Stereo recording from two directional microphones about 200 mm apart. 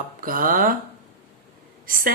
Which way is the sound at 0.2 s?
45° right (ahead or behind).